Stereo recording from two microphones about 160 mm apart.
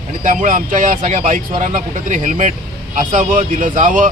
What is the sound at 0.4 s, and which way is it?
Speech, 55° right (ahead or behind).